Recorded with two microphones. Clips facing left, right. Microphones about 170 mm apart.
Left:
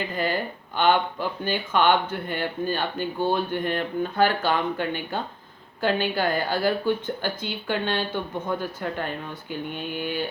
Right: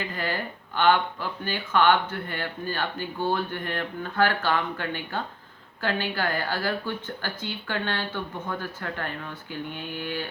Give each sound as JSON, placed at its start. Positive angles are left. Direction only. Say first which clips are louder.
{"t": 0.0, "sound": "speech", "louder": "left 4 dB", "side_deg": 20}